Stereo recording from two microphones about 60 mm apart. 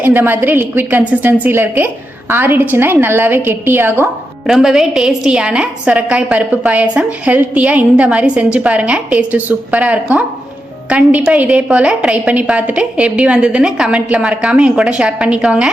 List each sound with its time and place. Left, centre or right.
0.0 s a woman's voice: right
4.4 s a woman's voice: centre